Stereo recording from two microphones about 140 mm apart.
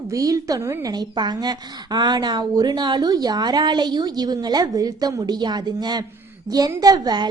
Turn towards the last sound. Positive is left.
turn(degrees=-30)  # may be behind; listen again after turning